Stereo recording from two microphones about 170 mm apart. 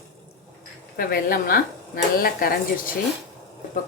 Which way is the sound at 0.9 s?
60° left (ahead or behind).